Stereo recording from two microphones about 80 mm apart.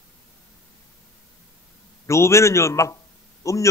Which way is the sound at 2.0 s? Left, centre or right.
Left.